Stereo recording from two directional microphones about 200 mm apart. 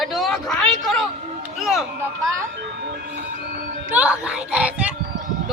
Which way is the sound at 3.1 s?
50° right (ahead or behind).